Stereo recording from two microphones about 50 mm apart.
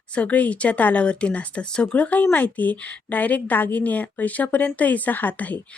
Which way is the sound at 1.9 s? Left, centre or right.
Left.